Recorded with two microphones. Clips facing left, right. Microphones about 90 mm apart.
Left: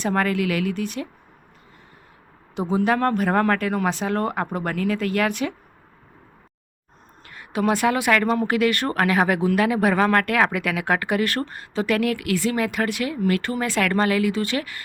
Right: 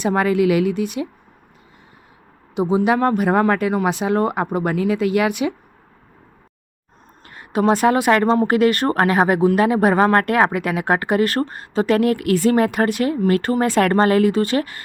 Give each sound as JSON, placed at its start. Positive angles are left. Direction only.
{"t": 0.0, "sound": "speech", "side_deg": -15}
{"t": 2.6, "sound": "speech", "side_deg": -15}
{"t": 7.3, "sound": "speech", "side_deg": -35}